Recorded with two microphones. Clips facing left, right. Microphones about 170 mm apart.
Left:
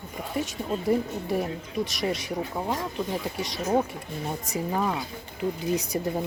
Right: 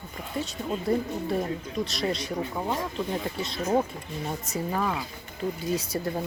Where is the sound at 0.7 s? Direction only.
10° left (ahead or behind).